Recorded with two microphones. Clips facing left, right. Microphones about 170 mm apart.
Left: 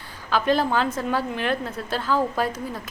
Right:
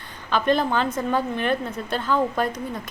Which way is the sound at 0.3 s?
5° left (ahead or behind).